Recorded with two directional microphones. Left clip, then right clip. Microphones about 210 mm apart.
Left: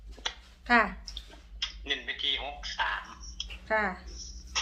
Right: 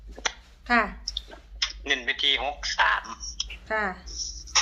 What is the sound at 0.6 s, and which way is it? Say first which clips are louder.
Speech: right 1 dB; centre (ahead or behind).